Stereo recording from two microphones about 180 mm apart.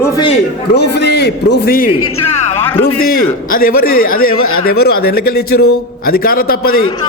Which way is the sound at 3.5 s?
55° left (ahead or behind).